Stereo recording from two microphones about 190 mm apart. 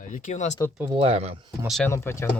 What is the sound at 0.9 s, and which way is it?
Speech, 30° right (ahead or behind).